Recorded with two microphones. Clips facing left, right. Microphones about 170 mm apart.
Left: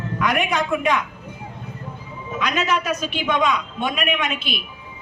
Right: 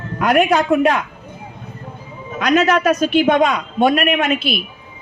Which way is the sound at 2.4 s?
45° right (ahead or behind).